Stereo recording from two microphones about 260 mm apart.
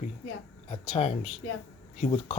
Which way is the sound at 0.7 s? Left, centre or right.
Left.